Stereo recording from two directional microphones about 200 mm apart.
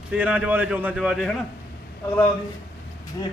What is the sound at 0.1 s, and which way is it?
Speech, 5° right (ahead or behind).